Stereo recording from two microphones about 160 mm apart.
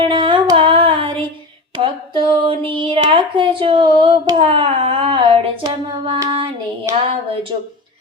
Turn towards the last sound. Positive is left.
turn(degrees=-20)  # may be behind; listen again after turning